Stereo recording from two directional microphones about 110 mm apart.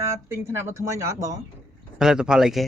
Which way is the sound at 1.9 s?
5° right (ahead or behind).